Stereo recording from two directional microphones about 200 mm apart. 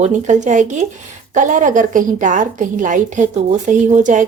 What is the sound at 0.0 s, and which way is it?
Speech, 35° right (ahead or behind).